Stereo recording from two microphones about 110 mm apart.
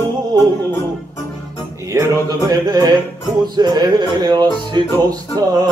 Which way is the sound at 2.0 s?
35° right (ahead or behind).